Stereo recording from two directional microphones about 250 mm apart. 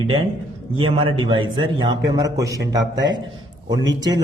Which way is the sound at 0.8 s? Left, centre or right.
Right.